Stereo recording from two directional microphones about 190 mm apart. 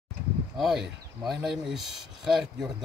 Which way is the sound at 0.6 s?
Centre (ahead or behind).